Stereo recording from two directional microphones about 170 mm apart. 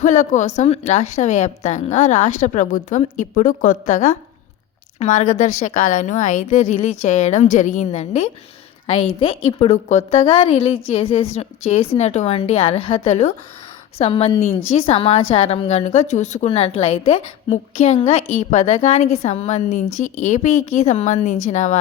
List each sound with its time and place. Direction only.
0.0 s a woman's voice: 45° left (ahead or behind)